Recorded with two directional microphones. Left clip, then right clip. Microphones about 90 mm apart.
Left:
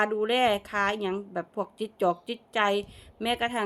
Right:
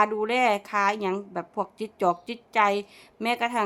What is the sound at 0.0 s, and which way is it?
A woman's voice, 25° right (ahead or behind).